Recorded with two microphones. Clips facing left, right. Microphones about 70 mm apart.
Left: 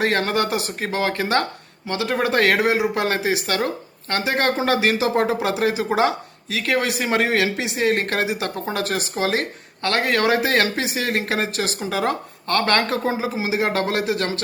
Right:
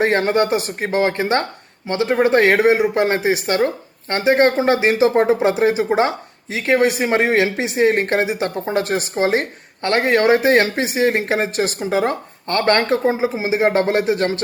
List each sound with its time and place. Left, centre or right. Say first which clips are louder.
0.0 s speech: right 4 dB; right